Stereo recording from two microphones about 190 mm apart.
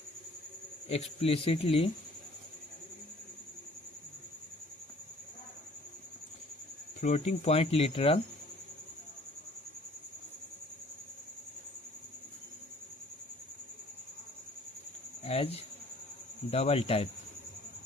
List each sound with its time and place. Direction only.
0.9 s speech: 30° left (ahead or behind)
7.0 s speech: 35° left (ahead or behind)
15.2 s cricket: 30° left (ahead or behind)
16.5 s speech: 35° left (ahead or behind)